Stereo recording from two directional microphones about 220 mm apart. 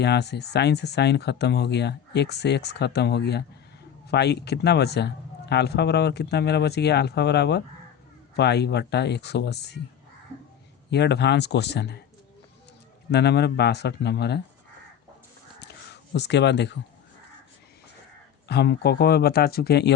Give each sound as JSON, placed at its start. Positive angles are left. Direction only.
{"t": 0.0, "sound": "a man's voice", "side_deg": 50}
{"t": 10.9, "sound": "a man's voice", "side_deg": 50}
{"t": 13.1, "sound": "a man's voice", "side_deg": 50}
{"t": 15.6, "sound": "a sound", "side_deg": 50}
{"t": 18.4, "sound": "a man's voice", "side_deg": 50}